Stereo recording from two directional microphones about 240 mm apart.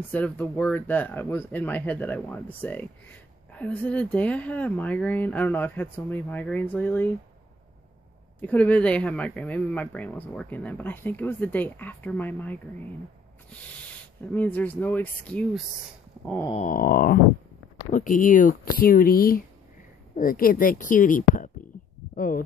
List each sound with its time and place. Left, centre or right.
0.1 s speech: centre
8.4 s speech: centre
14.3 s speech: centre
16.5 s speech: left